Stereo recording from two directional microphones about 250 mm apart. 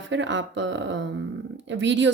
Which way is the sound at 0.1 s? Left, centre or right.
Right.